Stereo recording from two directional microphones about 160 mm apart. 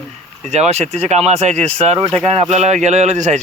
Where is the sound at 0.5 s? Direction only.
45° right (ahead or behind).